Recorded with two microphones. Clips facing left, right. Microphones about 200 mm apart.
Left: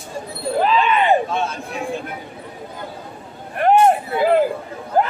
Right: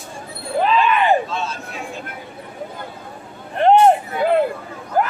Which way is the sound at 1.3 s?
55° left (ahead or behind).